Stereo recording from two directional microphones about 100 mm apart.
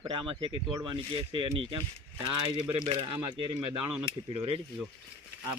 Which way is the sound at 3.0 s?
55° right (ahead or behind).